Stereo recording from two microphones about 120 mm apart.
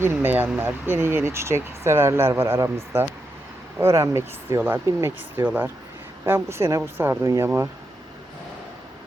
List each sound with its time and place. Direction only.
0.0 s speech: 20° right (ahead or behind)